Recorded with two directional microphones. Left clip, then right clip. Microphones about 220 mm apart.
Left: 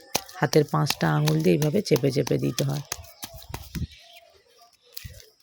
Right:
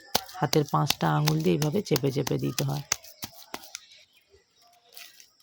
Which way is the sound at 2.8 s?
15° right (ahead or behind).